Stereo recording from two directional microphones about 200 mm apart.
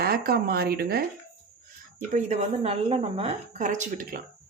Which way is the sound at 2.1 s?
35° right (ahead or behind).